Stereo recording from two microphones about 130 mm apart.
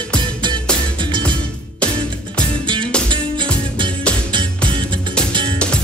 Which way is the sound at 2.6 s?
40° right (ahead or behind).